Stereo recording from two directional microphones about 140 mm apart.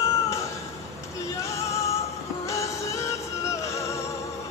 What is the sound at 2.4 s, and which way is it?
Music, 20° left (ahead or behind).